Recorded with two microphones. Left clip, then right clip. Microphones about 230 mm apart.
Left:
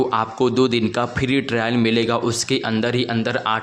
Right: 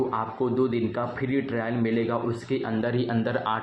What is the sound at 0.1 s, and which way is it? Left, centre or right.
A man's voice, left.